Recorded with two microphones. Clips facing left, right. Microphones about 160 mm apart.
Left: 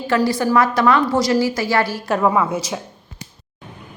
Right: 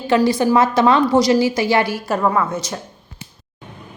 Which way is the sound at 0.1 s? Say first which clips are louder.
Right 2 dB; 20° right (ahead or behind).